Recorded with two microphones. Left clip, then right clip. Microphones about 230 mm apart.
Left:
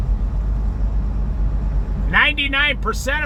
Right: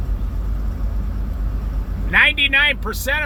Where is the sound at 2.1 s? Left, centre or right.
Centre.